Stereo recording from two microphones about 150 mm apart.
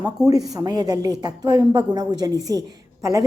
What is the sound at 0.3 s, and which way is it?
A woman's voice, 25° right (ahead or behind).